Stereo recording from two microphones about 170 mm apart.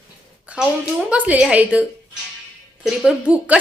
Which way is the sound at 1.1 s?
10° right (ahead or behind).